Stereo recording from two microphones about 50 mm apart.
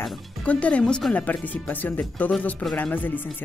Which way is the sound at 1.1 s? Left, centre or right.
Left.